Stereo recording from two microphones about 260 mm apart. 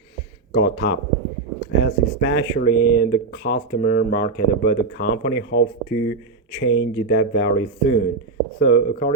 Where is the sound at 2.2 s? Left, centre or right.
Left.